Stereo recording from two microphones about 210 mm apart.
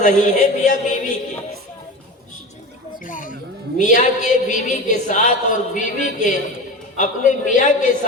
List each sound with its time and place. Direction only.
0.0 s a woman's voice: 35° left (ahead or behind)
3.1 s a sound: 40° left (ahead or behind)
3.8 s a woman's voice: 35° left (ahead or behind)